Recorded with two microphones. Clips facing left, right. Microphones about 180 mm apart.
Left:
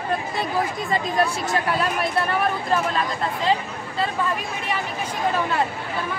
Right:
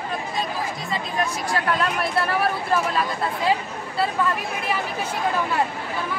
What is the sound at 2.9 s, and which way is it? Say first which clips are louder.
Speech: even; 10° right (ahead or behind).